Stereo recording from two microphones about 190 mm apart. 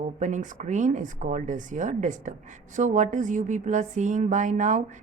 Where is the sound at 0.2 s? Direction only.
40° right (ahead or behind).